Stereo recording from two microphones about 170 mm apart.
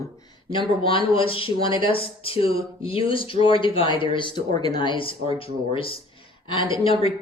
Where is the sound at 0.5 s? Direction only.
30° left (ahead or behind).